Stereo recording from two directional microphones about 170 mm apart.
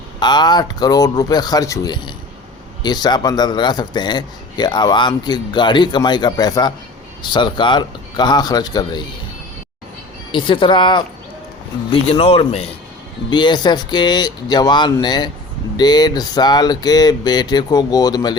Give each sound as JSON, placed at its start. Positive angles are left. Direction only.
{"t": 0.2, "sound": "a man's voice", "side_deg": 25}
{"t": 10.3, "sound": "a man's voice", "side_deg": 30}